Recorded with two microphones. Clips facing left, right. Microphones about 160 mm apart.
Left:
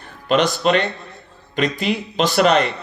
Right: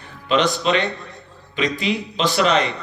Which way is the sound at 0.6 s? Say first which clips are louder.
Left 2 dB; 50° left (ahead or behind).